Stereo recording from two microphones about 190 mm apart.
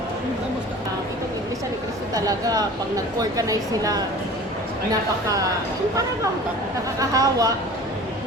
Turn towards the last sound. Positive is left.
turn(degrees=-20)  # may be behind; listen again after turning